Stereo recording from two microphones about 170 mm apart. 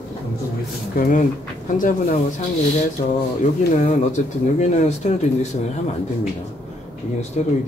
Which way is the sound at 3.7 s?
45° left (ahead or behind).